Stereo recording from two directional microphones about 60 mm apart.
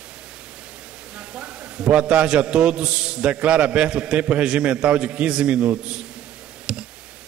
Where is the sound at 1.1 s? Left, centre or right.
Centre.